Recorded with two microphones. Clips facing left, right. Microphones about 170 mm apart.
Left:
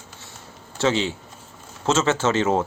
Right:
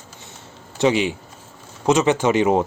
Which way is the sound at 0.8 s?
15° right (ahead or behind).